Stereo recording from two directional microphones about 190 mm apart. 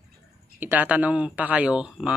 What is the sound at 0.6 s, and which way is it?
Speech, 10° right (ahead or behind).